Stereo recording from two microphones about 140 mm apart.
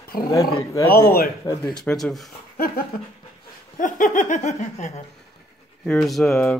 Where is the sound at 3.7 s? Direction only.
70° left (ahead or behind).